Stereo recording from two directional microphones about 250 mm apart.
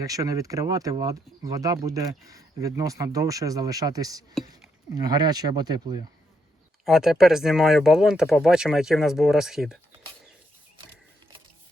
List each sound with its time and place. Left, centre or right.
0.0 s speech: centre
6.8 s speech: centre